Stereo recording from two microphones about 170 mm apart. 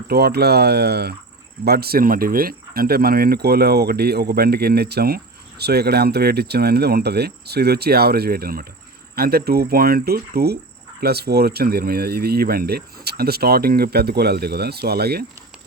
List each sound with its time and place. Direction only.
0.1 s speech: 70° right (ahead or behind)